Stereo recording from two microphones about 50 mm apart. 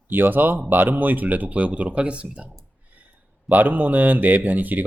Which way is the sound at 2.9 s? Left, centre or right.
Right.